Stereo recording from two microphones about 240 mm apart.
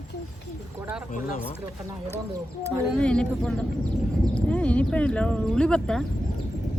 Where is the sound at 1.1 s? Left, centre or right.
Left.